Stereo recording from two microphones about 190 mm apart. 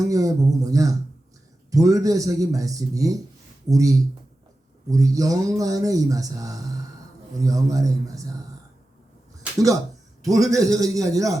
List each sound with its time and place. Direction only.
0.0 s a sound: 20° right (ahead or behind)
1.7 s speech: 20° right (ahead or behind)
10.2 s speech: 20° right (ahead or behind)